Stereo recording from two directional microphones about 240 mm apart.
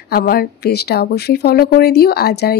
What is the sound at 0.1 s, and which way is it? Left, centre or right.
Speech, left.